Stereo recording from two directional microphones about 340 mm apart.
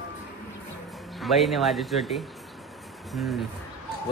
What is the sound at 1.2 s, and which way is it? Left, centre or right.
Speech, centre.